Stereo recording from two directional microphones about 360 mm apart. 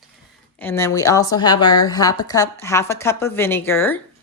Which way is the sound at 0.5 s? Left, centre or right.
Centre.